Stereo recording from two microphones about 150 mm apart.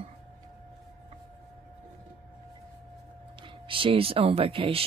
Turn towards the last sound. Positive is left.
turn(degrees=-40)  # may be behind; listen again after turning